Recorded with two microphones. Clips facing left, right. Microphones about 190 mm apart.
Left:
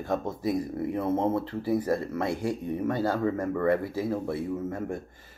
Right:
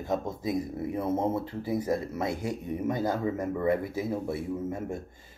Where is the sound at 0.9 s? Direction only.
10° right (ahead or behind).